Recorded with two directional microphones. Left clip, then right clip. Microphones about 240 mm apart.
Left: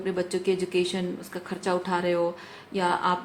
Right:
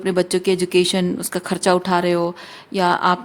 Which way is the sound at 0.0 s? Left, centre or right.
Right.